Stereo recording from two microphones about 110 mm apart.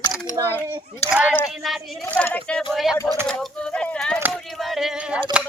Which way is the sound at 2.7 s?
Centre (ahead or behind).